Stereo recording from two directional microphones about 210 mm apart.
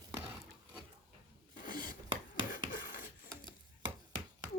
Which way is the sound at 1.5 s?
40° left (ahead or behind).